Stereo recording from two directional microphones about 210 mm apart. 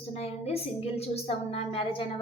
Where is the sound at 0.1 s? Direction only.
30° left (ahead or behind).